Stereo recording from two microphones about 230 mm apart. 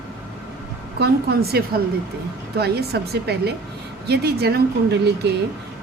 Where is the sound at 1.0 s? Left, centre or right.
Right.